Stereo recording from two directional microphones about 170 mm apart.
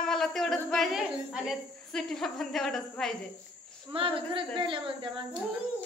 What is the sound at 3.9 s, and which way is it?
Speech, 30° right (ahead or behind).